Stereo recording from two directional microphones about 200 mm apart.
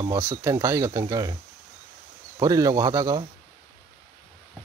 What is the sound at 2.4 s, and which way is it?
Speech, 15° right (ahead or behind).